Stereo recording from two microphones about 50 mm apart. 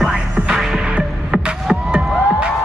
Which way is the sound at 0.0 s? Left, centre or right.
Centre.